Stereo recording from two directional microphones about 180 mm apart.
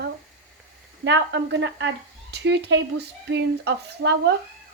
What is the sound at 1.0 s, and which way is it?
Speech, 75° right (ahead or behind).